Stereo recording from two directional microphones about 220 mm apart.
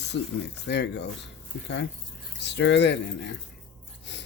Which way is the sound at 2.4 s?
50° left (ahead or behind).